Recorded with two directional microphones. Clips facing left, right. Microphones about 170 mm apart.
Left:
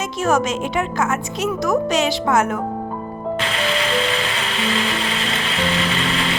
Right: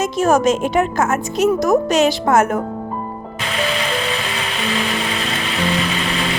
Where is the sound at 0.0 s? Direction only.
40° right (ahead or behind).